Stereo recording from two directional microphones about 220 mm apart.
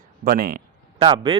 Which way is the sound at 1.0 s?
20° right (ahead or behind).